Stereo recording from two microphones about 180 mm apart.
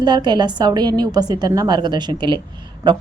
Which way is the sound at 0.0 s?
25° right (ahead or behind).